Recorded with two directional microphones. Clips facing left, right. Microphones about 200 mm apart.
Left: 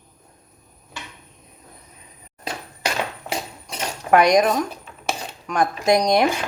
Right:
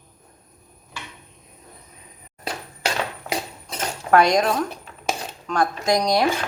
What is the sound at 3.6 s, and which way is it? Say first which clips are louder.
Cutlery: even; 15° left (ahead or behind).